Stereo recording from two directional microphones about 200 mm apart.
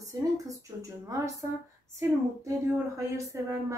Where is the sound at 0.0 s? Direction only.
15° right (ahead or behind).